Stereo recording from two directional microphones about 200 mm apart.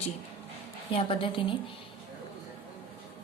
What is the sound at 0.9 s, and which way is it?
Speech, 25° left (ahead or behind).